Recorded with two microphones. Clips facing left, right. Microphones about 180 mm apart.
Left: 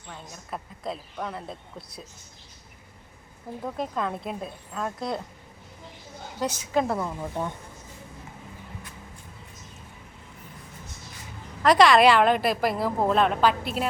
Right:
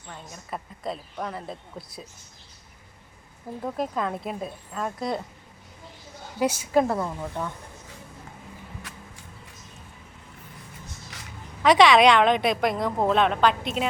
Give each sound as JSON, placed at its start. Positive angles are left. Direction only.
{"t": 0.1, "sound": "a woman's voice", "side_deg": 0}
{"t": 3.6, "sound": "a woman's voice", "side_deg": 0}
{"t": 6.4, "sound": "a woman's voice", "side_deg": -10}
{"t": 11.6, "sound": "a woman's voice", "side_deg": 0}